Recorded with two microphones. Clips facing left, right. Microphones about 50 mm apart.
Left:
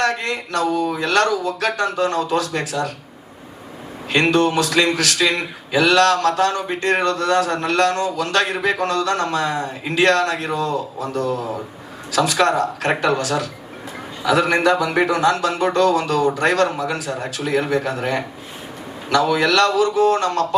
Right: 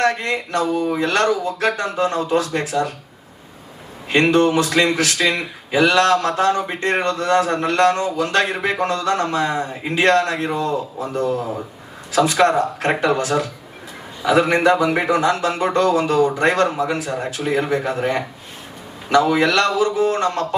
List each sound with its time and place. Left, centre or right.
0.0 s speech: right
4.1 s speech: right